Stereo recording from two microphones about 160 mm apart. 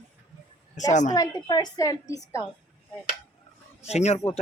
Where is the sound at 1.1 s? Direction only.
25° left (ahead or behind).